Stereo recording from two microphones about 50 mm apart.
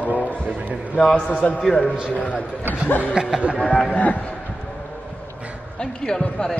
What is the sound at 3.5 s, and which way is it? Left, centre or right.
Speech, left.